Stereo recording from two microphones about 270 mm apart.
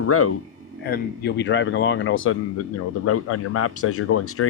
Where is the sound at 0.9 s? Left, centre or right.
Left.